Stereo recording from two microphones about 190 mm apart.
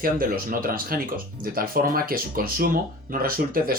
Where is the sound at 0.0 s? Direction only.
50° right (ahead or behind).